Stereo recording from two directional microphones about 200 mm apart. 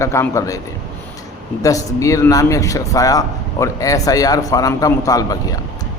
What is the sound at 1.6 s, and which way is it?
Speech, 15° left (ahead or behind).